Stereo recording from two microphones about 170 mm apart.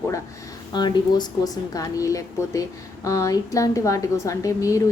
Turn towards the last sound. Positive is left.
turn(degrees=20)  # may be behind; listen again after turning